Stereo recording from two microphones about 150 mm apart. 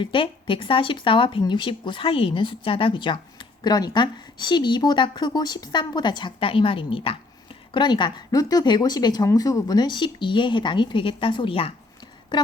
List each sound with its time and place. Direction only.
0.0 s a woman's voice: 35° left (ahead or behind)